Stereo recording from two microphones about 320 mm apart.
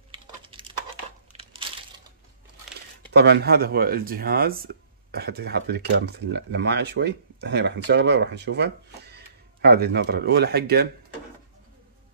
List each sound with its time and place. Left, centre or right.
0.1 s computer keyboard: centre
1.3 s crushing: centre
3.1 s speech: right